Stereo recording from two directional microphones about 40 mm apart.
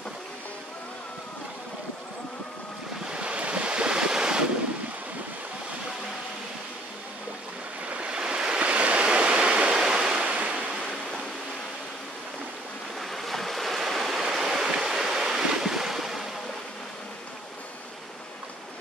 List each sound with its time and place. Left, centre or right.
3.1 s waves: right
8.0 s waves: right
8.5 s waves: right
13.0 s waves: centre
14.2 s waves: centre